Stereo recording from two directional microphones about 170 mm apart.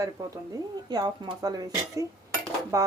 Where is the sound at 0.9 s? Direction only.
25° right (ahead or behind).